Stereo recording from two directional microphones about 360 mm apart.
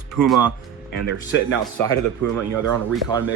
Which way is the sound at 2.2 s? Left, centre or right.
Right.